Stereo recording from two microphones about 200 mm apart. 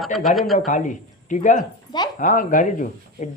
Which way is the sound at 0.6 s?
40° left (ahead or behind).